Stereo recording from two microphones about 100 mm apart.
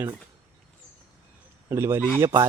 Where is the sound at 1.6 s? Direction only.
25° right (ahead or behind).